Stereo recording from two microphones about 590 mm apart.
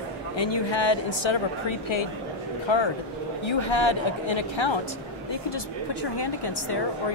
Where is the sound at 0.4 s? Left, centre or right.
Left.